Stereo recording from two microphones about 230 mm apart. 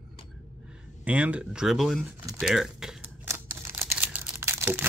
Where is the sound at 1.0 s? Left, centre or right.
Centre.